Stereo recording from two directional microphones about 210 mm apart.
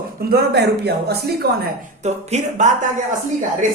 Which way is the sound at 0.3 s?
50° right (ahead or behind).